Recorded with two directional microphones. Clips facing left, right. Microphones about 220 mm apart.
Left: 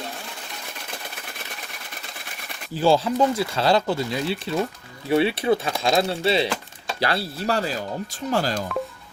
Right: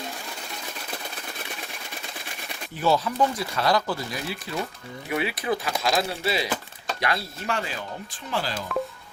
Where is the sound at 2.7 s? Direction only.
30° left (ahead or behind).